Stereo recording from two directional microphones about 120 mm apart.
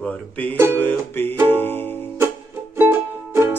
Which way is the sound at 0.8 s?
15° left (ahead or behind).